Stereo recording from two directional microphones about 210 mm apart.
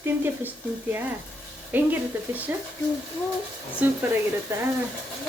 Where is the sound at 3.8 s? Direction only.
10° right (ahead or behind).